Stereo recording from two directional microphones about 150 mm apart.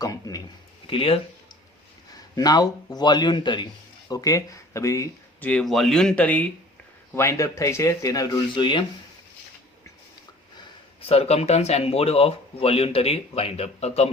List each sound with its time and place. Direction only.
0.0 s a sound: 25° left (ahead or behind)
0.9 s speech: 35° left (ahead or behind)
2.1 s speech: 25° left (ahead or behind)
5.5 s speech: 5° left (ahead or behind); by 8.8 s 30° left (ahead or behind)
11.0 s speech: 40° left (ahead or behind)